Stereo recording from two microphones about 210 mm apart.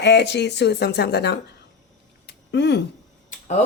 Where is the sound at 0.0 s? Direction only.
55° left (ahead or behind).